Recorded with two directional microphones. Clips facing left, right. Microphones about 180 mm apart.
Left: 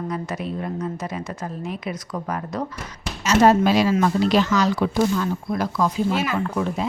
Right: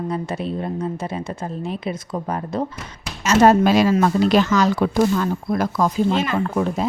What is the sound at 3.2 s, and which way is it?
Speech, 50° right (ahead or behind).